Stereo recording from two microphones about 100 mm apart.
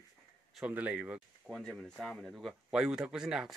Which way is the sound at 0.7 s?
15° right (ahead or behind).